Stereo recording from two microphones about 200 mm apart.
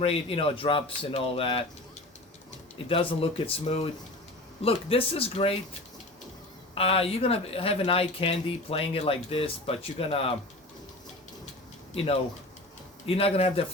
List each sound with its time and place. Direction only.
0.0 s speech: 30° left (ahead or behind)
2.7 s speech: 25° left (ahead or behind)
6.7 s speech: 30° left (ahead or behind)
13.1 s speech: 30° left (ahead or behind)